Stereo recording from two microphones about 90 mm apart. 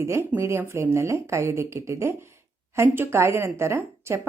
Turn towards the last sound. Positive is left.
turn(degrees=-30)  # may be behind; listen again after turning